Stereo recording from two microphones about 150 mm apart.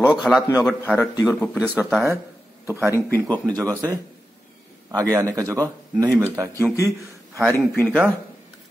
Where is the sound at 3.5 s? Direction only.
25° right (ahead or behind).